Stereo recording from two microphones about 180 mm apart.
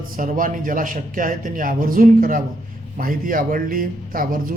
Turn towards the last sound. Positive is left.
turn(degrees=-50)  # may be behind; listen again after turning